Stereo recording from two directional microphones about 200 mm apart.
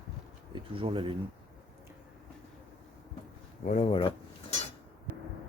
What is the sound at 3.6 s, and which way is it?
Speech, 30° left (ahead or behind).